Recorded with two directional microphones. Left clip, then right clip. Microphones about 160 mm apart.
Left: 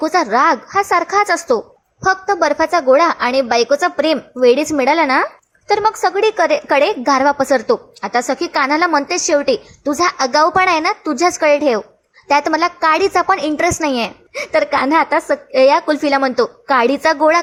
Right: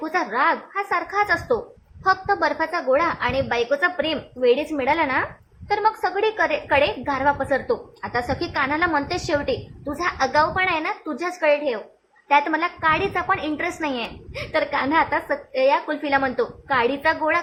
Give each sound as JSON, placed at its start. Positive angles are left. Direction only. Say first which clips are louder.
{"t": 0.0, "sound": "a woman's voice", "louder": "left 8 dB", "side_deg": 35}
{"t": 12.3, "sound": "a woman's voice", "louder": "left 5 dB", "side_deg": 35}